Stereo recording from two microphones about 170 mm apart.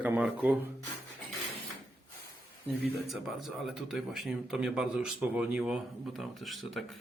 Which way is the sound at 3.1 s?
Centre (ahead or behind).